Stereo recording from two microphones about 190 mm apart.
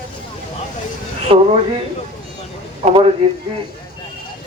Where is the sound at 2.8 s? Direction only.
35° right (ahead or behind).